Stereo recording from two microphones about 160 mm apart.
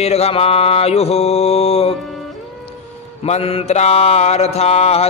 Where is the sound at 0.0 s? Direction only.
40° left (ahead or behind).